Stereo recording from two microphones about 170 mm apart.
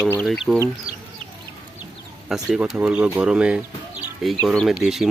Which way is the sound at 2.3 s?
5° right (ahead or behind).